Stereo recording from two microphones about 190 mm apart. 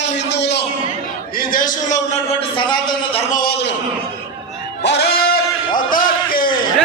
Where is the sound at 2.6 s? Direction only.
25° left (ahead or behind).